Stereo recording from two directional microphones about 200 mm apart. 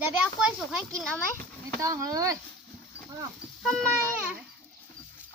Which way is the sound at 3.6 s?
Centre (ahead or behind).